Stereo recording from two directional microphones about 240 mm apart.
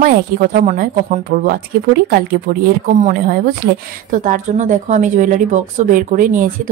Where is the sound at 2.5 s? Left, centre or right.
Right.